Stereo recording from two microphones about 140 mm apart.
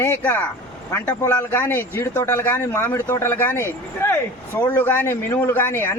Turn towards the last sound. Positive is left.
turn(degrees=15)  # may be behind; listen again after turning